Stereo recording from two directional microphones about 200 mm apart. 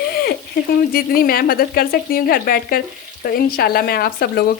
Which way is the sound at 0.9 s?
45° left (ahead or behind).